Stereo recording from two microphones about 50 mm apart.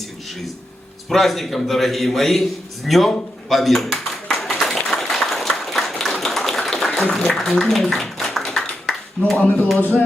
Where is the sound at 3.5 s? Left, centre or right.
Centre.